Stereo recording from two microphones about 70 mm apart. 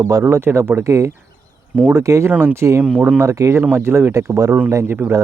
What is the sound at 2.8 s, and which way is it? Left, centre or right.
Speech, centre.